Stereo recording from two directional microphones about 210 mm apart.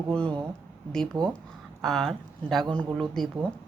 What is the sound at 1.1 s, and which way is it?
Speech, 20° right (ahead or behind).